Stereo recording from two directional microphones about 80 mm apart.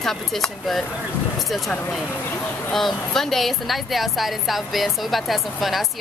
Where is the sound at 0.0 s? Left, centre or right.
Centre.